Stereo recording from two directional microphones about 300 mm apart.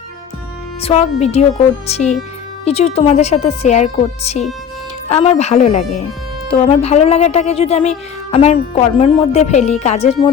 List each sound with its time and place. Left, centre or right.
0.8 s speech: left